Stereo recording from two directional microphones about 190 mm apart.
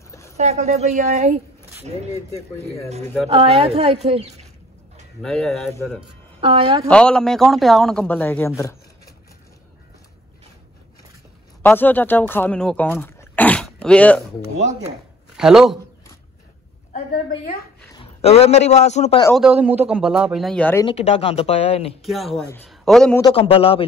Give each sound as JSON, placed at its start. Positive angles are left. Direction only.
{"t": 0.4, "sound": "speech", "side_deg": -35}
{"t": 3.3, "sound": "speech", "side_deg": -30}
{"t": 5.2, "sound": "speech", "side_deg": 0}
{"t": 5.7, "sound": "speech", "side_deg": 15}
{"t": 6.4, "sound": "a woman's voice", "side_deg": -25}
{"t": 6.9, "sound": "speech", "side_deg": 5}
{"t": 11.6, "sound": "speech", "side_deg": 10}
{"t": 15.3, "sound": "speech", "side_deg": -5}
{"t": 16.9, "sound": "a woman's voice", "side_deg": 45}
{"t": 17.9, "sound": "a man's voice", "side_deg": 30}
{"t": 19.3, "sound": "speech", "side_deg": -5}
{"t": 20.8, "sound": "speech", "side_deg": 35}
{"t": 22.0, "sound": "a man's voice", "side_deg": 0}
{"t": 23.3, "sound": "speech", "side_deg": 30}